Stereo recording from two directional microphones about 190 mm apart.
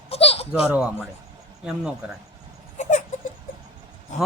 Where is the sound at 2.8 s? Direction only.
40° left (ahead or behind).